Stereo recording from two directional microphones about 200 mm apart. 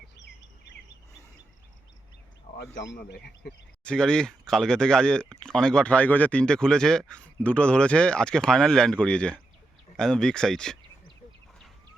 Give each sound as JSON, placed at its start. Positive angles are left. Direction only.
{"t": 2.6, "sound": "speech", "side_deg": 60}
{"t": 3.8, "sound": "speech", "side_deg": 5}